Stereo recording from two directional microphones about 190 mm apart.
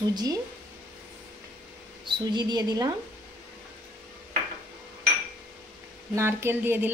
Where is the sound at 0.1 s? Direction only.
20° right (ahead or behind).